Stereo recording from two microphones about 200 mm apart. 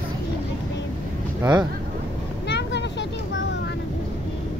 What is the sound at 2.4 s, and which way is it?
Vehicle, 60° left (ahead or behind).